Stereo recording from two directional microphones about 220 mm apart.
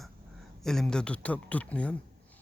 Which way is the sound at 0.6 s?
Centre (ahead or behind).